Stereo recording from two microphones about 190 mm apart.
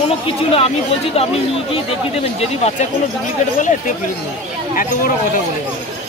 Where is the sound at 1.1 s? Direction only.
30° left (ahead or behind).